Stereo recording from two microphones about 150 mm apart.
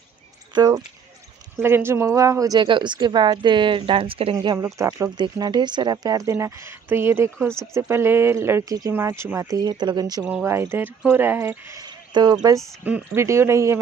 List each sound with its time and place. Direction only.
0.6 s a woman's voice: 25° right (ahead or behind)
4.4 s speech: 25° right (ahead or behind)
10.2 s speech: 15° right (ahead or behind)
12.8 s speech: 15° right (ahead or behind)